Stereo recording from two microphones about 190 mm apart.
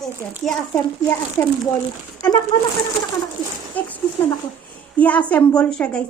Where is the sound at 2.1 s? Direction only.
20° left (ahead or behind).